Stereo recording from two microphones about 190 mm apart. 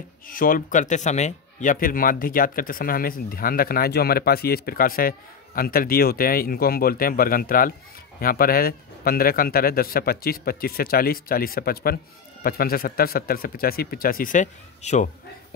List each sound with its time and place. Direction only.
0.3 s speech: 50° left (ahead or behind)